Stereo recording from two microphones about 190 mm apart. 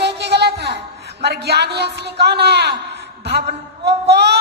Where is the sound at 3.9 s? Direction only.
60° right (ahead or behind).